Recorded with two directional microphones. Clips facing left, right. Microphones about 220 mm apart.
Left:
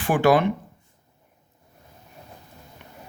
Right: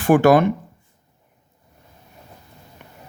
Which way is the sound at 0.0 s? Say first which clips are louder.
Right 5 dB; 45° right (ahead or behind).